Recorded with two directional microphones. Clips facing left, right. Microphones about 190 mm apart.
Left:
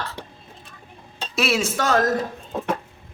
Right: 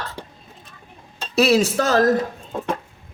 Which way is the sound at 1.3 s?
35° right (ahead or behind).